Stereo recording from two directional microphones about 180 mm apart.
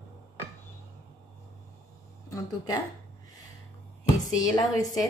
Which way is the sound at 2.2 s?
20° left (ahead or behind).